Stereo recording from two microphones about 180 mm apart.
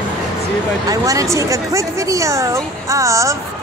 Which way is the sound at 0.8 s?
20° right (ahead or behind).